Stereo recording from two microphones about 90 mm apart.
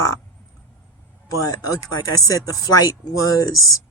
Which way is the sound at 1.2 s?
40° left (ahead or behind).